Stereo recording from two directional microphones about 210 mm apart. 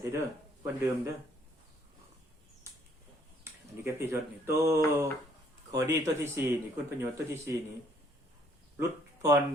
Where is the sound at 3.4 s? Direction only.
10° right (ahead or behind).